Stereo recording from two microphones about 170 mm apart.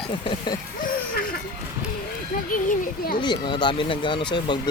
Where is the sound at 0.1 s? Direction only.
30° left (ahead or behind).